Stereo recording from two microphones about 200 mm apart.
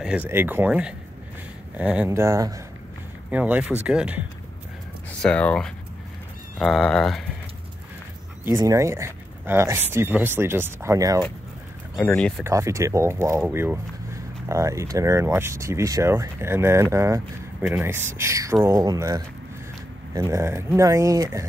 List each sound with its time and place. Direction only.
0.0 s speech: 5° right (ahead or behind)
5.2 s speech: 5° left (ahead or behind)
8.5 s speech: 15° right (ahead or behind)
12.0 s speech: 5° left (ahead or behind)
12.4 s speech: 15° right (ahead or behind)